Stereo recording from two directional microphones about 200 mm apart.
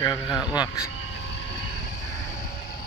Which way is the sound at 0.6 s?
15° left (ahead or behind).